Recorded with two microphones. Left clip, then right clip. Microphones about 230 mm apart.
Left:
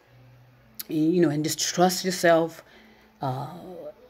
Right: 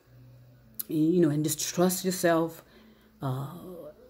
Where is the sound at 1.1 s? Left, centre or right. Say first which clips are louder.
Left 3 dB; centre.